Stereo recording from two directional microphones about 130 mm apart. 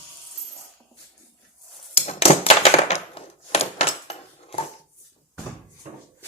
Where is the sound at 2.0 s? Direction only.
50° left (ahead or behind).